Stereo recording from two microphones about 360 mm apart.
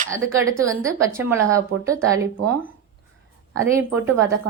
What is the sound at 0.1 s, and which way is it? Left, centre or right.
A woman's voice, centre.